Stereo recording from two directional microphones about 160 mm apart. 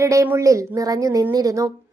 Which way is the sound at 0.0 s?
20° right (ahead or behind).